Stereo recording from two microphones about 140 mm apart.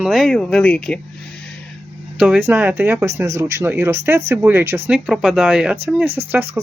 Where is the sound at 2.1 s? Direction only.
10° right (ahead or behind).